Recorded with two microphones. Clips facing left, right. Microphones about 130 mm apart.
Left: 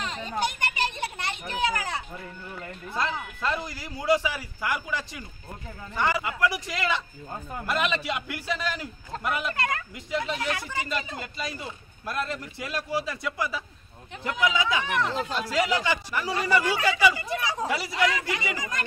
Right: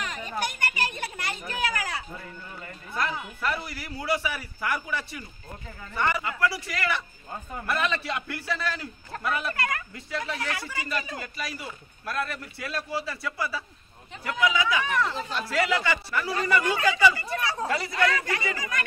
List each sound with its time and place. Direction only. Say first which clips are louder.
0.0 s a man's voice: left 2 dB; 30° left (ahead or behind)